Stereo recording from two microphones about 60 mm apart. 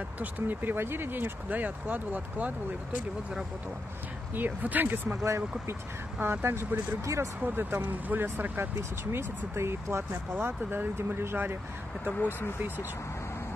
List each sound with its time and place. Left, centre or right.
0.2 s speech: right
4.3 s speech: right
5.1 s speech: right
6.2 s speech: right
9.1 s speech: right
10.3 s speech: right